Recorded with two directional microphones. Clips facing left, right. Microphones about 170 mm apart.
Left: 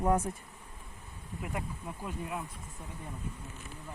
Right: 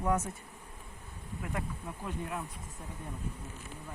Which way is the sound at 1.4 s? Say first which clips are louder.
Even; 15° left (ahead or behind).